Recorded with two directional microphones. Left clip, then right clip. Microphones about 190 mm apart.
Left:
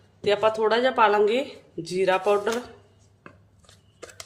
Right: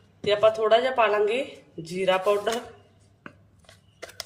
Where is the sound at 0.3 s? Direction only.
25° left (ahead or behind).